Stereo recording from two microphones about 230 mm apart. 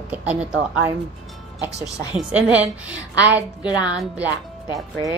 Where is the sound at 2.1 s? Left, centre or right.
Centre.